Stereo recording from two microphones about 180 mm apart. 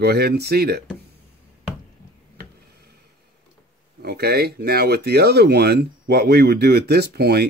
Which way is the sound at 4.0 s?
60° right (ahead or behind).